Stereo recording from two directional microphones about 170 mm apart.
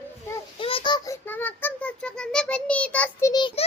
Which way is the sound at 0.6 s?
30° left (ahead or behind).